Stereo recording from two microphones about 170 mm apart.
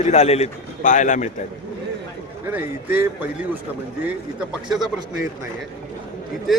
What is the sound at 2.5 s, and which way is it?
Speech, 10° right (ahead or behind).